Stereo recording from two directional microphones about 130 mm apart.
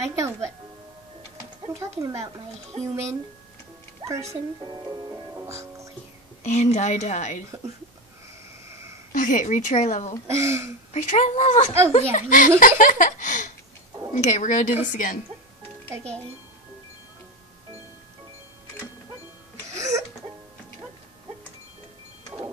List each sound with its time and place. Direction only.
0.0 s speech: 20° right (ahead or behind)
1.8 s speech: 25° right (ahead or behind)
2.7 s speech: 50° right (ahead or behind)
4.0 s speech: 25° right (ahead or behind)
4.6 s music: 30° right (ahead or behind)
6.4 s a woman's voice: 65° left (ahead or behind)
9.1 s speech: 80° left
10.2 s speech: 20° right (ahead or behind)
10.9 s a woman's voice: 60° left (ahead or behind)
11.9 s speech: 90° left
12.5 s a sound: 90° left
14.1 s a woman's voice: 65° left (ahead or behind); by 15.1 s 85° left
19.7 s music: 25° right (ahead or behind)